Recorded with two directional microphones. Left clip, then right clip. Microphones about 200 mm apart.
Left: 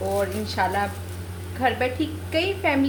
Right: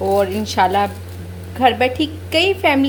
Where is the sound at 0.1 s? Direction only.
40° right (ahead or behind).